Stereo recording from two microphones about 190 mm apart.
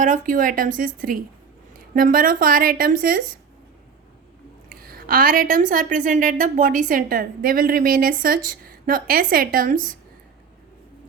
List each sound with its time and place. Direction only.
0.0 s a woman's voice: 45° right (ahead or behind)
4.7 s a woman's voice: 55° right (ahead or behind)